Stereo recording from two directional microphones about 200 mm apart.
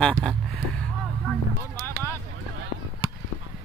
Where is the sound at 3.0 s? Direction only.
20° left (ahead or behind).